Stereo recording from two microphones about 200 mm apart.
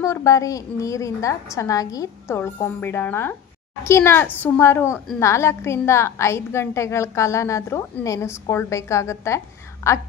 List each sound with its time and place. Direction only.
0.0 s a woman's voice: 15° left (ahead or behind)